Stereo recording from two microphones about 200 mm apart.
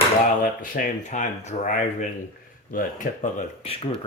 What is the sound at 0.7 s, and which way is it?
Speech, 40° left (ahead or behind).